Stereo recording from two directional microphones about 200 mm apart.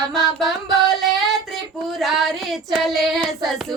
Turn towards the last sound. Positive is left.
turn(degrees=0)  # may be behind; listen again after turning